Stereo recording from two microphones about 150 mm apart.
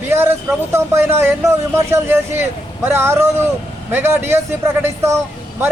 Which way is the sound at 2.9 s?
15° right (ahead or behind).